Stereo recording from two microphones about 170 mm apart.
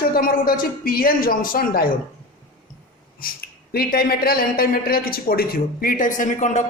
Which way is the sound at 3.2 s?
60° left (ahead or behind).